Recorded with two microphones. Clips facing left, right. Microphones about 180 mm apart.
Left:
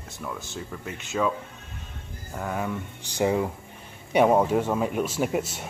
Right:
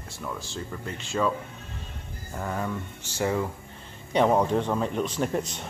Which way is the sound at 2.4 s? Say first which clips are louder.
Left 1 dB; 5° left (ahead or behind).